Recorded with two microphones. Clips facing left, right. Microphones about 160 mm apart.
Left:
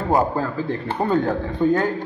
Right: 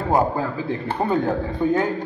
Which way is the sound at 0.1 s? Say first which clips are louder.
Even; 10° right (ahead or behind).